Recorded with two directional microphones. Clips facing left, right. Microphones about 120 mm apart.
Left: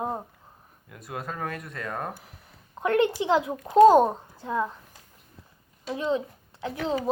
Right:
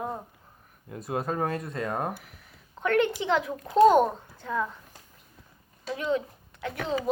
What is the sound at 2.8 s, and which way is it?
A child's voice, 35° left (ahead or behind).